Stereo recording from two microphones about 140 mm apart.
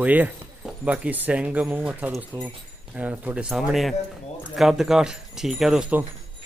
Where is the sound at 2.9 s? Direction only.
10° right (ahead or behind).